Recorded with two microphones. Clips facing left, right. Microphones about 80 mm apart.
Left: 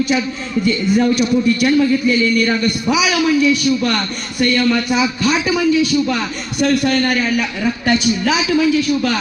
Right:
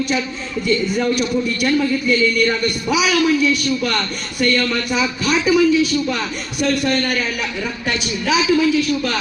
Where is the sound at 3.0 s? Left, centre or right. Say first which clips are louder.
Left 1 dB; centre.